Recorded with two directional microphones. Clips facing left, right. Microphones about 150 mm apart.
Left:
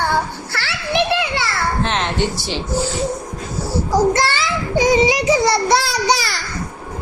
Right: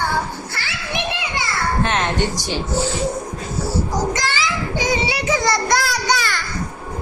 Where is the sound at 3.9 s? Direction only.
60° left (ahead or behind).